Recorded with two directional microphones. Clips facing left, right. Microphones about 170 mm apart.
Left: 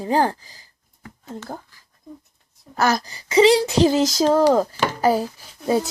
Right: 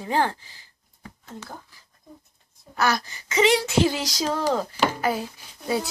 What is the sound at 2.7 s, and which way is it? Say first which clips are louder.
Speech: left 4 dB; 40° left (ahead or behind).